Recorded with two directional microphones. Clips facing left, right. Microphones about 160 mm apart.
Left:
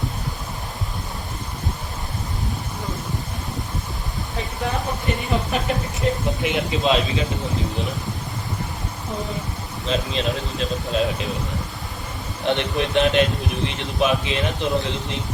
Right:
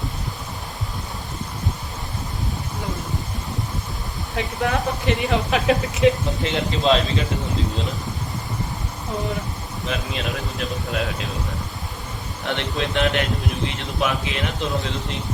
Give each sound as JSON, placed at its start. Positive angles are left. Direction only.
{"t": 4.6, "sound": "speech", "side_deg": -80}
{"t": 6.4, "sound": "speech", "side_deg": 15}
{"t": 9.9, "sound": "speech", "side_deg": 25}
{"t": 12.5, "sound": "speech", "side_deg": 20}